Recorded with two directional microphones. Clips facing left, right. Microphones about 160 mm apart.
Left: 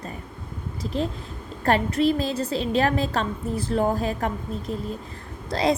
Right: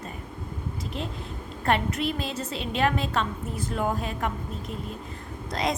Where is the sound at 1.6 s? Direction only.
35° left (ahead or behind).